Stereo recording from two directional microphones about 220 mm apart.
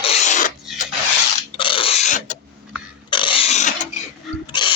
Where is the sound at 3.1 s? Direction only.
20° left (ahead or behind).